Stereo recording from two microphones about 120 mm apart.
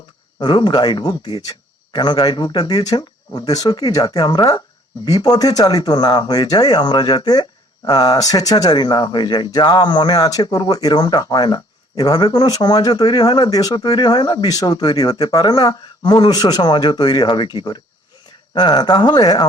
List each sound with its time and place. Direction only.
0.3 s speech: 40° left (ahead or behind)